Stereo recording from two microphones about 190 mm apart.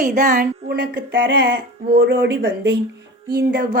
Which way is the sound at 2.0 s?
60° right (ahead or behind).